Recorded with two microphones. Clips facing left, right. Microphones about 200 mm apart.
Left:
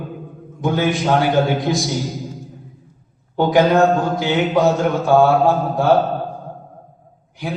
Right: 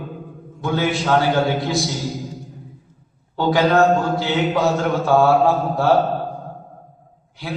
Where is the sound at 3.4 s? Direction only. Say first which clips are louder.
Left 2 dB; 15° left (ahead or behind).